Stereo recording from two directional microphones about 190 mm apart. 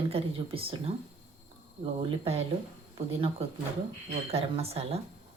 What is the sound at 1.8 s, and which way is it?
Speech, 30° right (ahead or behind).